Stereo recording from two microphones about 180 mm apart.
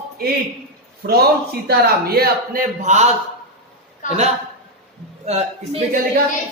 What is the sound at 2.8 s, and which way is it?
Speech, 40° right (ahead or behind).